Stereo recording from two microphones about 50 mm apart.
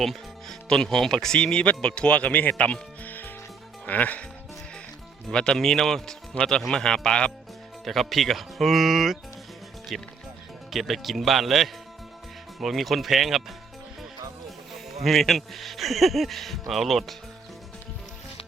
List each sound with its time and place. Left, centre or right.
0.0 s music: centre
0.7 s speech: centre; by 2.7 s left
3.0 s music: left
3.8 s speech: left
5.3 s speech: centre
6.3 s speech: left
6.7 s speech: centre
7.9 s a man's voice: centre
14.7 s a man's voice: centre